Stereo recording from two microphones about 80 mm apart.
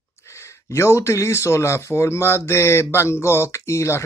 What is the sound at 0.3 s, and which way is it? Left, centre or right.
Speech, left.